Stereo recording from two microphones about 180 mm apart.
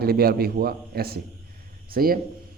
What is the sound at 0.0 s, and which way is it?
Speech, 60° right (ahead or behind).